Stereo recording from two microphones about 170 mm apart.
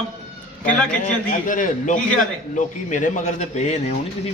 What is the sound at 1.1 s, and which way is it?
Speech, 50° left (ahead or behind).